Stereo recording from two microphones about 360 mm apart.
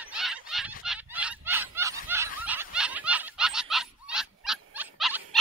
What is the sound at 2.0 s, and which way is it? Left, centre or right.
Snicker, centre.